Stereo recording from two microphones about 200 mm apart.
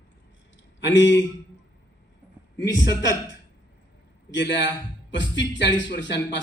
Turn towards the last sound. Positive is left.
turn(degrees=60)  # may be behind; listen again after turning